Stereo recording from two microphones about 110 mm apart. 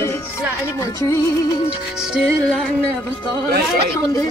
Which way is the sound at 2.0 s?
5° right (ahead or behind).